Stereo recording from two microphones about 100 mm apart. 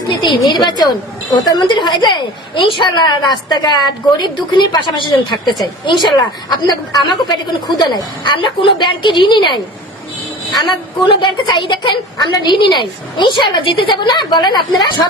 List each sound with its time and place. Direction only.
0.1 s a woman's voice: 50° left (ahead or behind)